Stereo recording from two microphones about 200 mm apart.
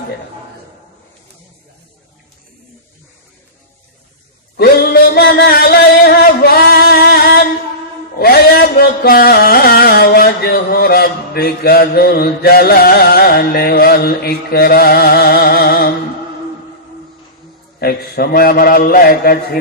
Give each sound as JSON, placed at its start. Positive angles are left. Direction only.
{"t": 4.6, "sound": "music", "side_deg": 50}
{"t": 17.7, "sound": "a man's voice", "side_deg": 50}